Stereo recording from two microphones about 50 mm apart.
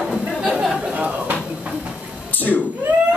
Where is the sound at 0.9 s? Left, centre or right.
Right.